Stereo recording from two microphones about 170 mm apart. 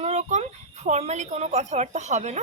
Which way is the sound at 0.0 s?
40° right (ahead or behind).